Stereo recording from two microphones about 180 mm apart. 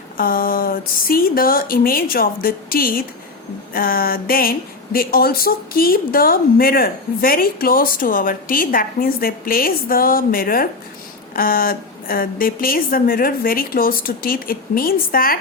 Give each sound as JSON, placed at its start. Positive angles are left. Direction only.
{"t": 0.2, "sound": "a woman's voice", "side_deg": 55}